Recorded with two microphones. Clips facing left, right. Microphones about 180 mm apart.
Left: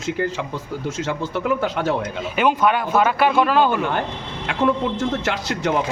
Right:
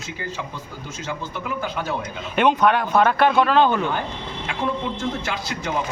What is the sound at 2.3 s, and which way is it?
Speech, 5° left (ahead or behind).